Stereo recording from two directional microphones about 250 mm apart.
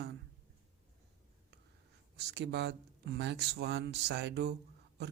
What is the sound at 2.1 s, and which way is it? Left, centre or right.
A man's voice, right.